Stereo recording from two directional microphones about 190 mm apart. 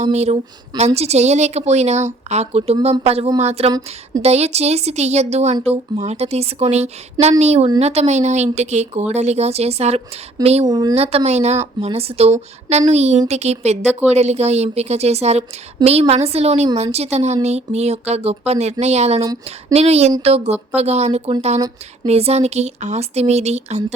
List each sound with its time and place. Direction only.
0.0 s a woman's voice: 35° right (ahead or behind)
10.7 s speech: 20° right (ahead or behind)
10.9 s a woman's voice: 30° right (ahead or behind)